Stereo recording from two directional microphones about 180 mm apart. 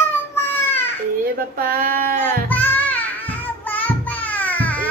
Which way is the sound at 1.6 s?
55° right (ahead or behind).